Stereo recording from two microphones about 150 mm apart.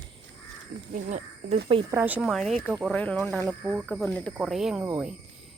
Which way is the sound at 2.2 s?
Centre (ahead or behind).